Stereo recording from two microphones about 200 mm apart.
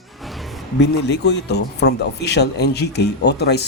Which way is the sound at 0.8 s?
60° left (ahead or behind).